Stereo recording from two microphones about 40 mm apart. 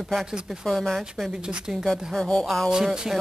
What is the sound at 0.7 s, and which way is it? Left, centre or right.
Speech, centre.